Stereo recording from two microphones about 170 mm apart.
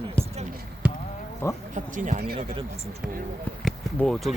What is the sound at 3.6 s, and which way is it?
Speech, centre (ahead or behind).